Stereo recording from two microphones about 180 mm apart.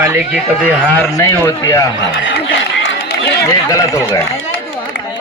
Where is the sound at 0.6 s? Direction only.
10° left (ahead or behind).